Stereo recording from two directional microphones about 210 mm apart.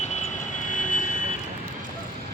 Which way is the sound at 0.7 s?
35° left (ahead or behind).